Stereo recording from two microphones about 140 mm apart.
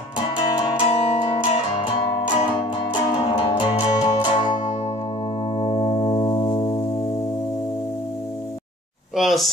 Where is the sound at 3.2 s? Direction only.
40° left (ahead or behind).